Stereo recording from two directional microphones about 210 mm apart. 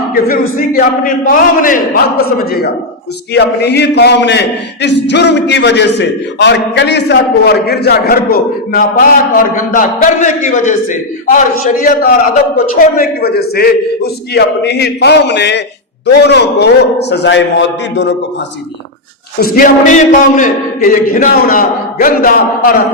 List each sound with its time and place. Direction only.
0.1 s a man's voice: 45° left (ahead or behind)
19.4 s a man's voice: 40° left (ahead or behind)